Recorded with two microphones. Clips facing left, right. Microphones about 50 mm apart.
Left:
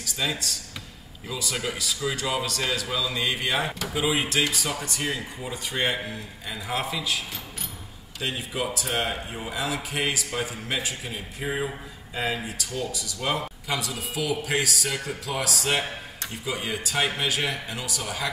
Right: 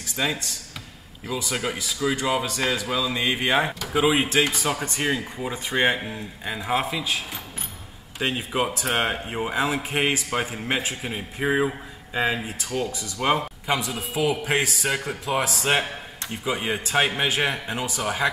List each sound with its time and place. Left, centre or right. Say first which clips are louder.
0.0 s a sound: right 3 dB; right
1.3 s speech: right 3 dB; right
8.2 s speech: right 5 dB; right